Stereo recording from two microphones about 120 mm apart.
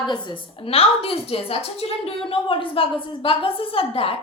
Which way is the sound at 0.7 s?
55° left (ahead or behind).